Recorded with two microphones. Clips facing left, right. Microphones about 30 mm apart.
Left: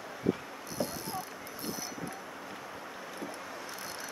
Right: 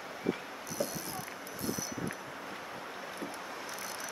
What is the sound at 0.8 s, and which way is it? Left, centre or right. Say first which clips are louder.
Rowboat: left 1 dB; left.